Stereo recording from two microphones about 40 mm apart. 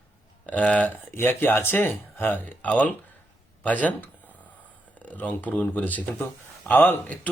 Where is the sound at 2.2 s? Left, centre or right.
Left.